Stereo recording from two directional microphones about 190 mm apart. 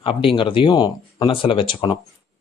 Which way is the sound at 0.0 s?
30° left (ahead or behind).